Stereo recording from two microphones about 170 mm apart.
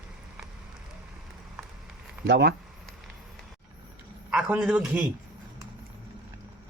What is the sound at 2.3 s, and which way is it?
Speech, 90° right.